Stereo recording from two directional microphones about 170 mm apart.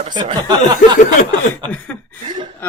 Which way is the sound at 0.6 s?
45° left (ahead or behind).